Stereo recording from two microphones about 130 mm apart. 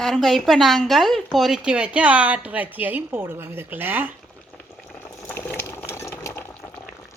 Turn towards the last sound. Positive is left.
turn(degrees=10)  # may be behind; listen again after turning